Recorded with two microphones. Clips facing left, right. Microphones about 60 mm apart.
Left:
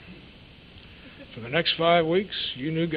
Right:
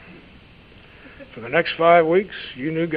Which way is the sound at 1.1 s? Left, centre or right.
Right.